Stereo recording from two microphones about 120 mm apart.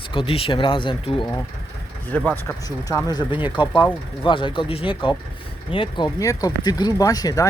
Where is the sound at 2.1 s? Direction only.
15° left (ahead or behind).